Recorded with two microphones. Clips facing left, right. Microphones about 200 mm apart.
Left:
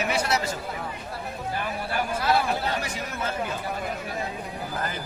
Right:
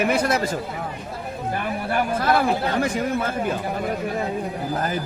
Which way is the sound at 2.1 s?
50° right (ahead or behind).